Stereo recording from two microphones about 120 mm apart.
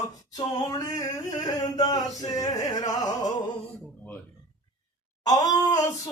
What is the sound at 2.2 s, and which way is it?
Music, 30° left (ahead or behind).